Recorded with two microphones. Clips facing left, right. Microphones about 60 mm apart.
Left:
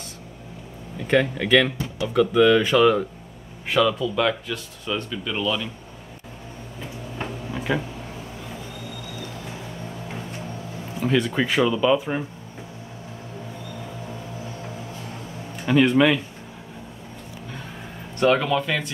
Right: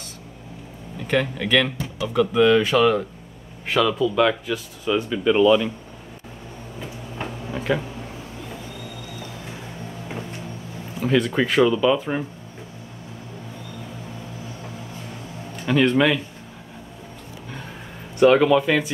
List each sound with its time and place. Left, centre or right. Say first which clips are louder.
1.1 s speech: left 2 dB; centre
2.3 s speech: even; centre
7.2 s a sound: right 1 dB; centre
11.0 s speech: right 2 dB; centre
15.6 s speech: left 1 dB; centre
18.2 s speech: right 5 dB; centre